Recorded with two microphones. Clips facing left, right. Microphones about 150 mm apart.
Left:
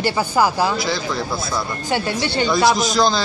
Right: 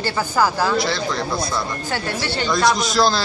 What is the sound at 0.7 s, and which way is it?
Speech, centre (ahead or behind).